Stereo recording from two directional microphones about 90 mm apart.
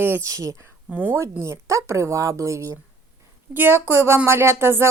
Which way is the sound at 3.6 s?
25° right (ahead or behind).